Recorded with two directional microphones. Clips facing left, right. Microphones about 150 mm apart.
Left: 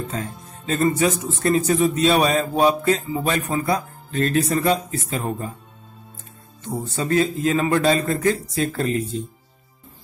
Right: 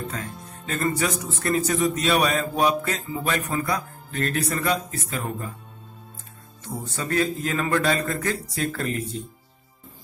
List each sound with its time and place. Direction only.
0.7 s a man's voice: 20° left (ahead or behind)
6.6 s a man's voice: 25° left (ahead or behind)